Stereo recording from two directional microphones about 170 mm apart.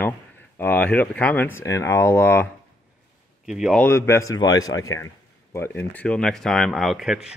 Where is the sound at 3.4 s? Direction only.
Centre (ahead or behind).